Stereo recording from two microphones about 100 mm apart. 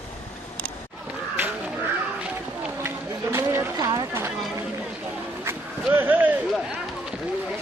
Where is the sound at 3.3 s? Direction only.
25° right (ahead or behind).